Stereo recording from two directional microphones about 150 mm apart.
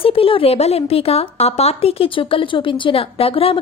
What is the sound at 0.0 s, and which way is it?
A woman's voice, 40° left (ahead or behind).